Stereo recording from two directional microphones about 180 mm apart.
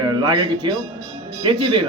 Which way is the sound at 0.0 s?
25° right (ahead or behind).